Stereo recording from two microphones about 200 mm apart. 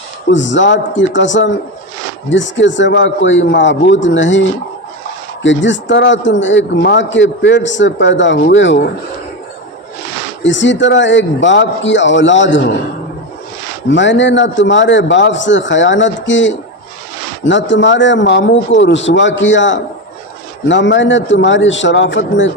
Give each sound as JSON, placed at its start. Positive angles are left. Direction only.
{"t": 0.3, "sound": "speech", "side_deg": 65}
{"t": 10.4, "sound": "speech", "side_deg": 65}
{"t": 13.9, "sound": "speech", "side_deg": 65}